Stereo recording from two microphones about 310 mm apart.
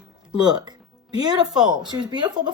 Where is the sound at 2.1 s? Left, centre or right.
Centre.